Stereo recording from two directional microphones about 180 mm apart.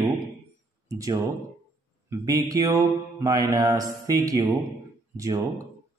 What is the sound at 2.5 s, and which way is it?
A man's voice, 20° right (ahead or behind).